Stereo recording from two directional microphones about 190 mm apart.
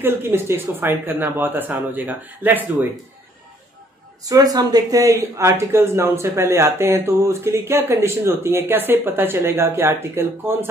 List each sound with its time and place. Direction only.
0.0 s speech: 10° right (ahead or behind)
4.2 s speech: 20° right (ahead or behind)